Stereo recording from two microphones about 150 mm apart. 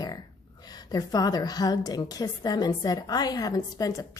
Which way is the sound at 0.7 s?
25° left (ahead or behind).